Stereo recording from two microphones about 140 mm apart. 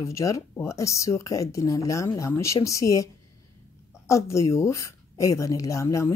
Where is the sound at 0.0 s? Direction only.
20° left (ahead or behind).